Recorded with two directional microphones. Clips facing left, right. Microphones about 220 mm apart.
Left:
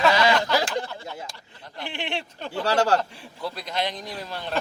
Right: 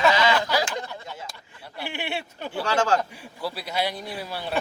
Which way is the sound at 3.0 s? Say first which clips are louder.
Right 1 dB; 5° right (ahead or behind).